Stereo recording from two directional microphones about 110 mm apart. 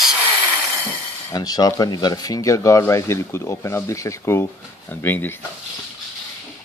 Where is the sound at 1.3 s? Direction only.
35° left (ahead or behind); by 5.4 s 20° left (ahead or behind).